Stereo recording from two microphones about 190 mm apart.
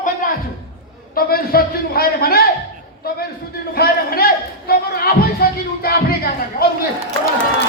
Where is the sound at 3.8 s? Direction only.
55° left (ahead or behind).